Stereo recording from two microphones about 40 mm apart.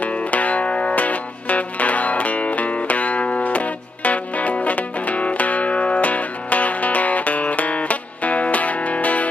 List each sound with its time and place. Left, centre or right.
0.0 s music: left